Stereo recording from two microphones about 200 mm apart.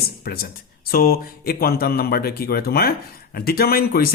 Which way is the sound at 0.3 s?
50° left (ahead or behind).